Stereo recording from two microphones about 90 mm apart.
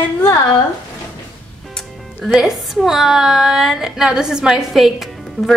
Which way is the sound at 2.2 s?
Centre (ahead or behind).